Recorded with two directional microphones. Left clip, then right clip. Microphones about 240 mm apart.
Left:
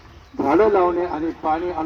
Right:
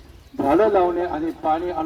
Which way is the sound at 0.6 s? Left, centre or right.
Centre.